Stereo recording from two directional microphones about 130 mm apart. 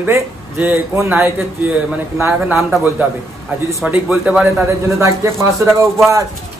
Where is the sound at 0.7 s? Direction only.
20° right (ahead or behind).